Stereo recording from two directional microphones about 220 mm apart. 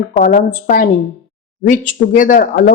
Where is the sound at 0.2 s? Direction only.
40° left (ahead or behind).